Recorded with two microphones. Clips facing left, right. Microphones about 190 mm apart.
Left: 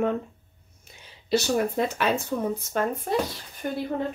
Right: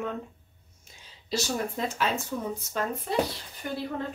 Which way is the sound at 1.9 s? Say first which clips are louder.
Left 4 dB; 60° left (ahead or behind).